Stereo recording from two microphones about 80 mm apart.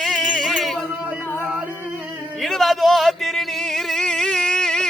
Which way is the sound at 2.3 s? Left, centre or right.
Centre.